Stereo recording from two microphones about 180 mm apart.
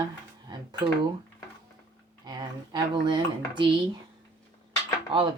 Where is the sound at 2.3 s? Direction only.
25° right (ahead or behind).